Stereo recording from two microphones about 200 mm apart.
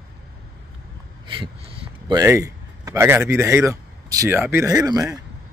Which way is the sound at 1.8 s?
20° right (ahead or behind).